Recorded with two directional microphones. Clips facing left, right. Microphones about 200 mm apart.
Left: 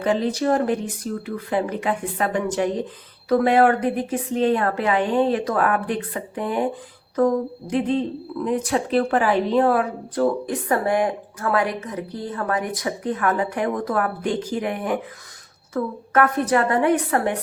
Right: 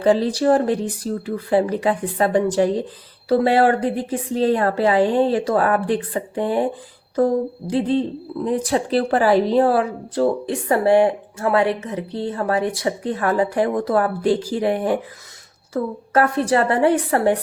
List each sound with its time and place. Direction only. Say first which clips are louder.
0.0 s speech: right 4 dB; 35° right (ahead or behind)
7.7 s a woman's voice: right 2 dB; 30° right (ahead or behind)